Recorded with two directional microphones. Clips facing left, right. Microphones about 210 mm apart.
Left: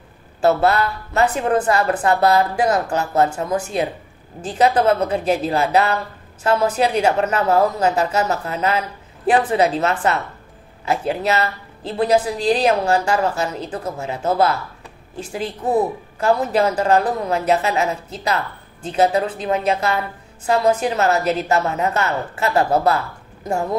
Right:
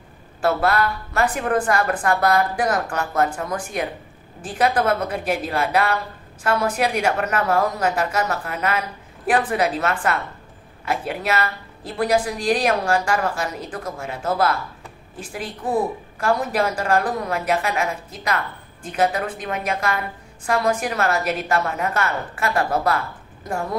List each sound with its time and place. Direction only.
0.4 s a woman's voice: 25° left (ahead or behind)